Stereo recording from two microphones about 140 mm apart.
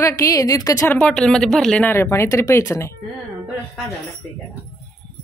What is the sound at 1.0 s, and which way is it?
Speech, 5° left (ahead or behind).